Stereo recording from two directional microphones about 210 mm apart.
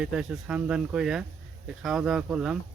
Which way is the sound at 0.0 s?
5° right (ahead or behind).